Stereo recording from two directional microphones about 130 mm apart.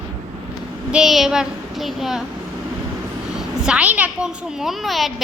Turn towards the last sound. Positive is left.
turn(degrees=0)  # may be behind; listen again after turning